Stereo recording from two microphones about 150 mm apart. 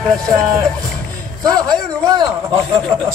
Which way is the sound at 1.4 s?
25° right (ahead or behind).